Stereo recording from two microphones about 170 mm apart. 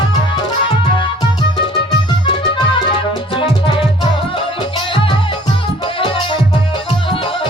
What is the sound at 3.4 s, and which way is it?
Music, 30° left (ahead or behind).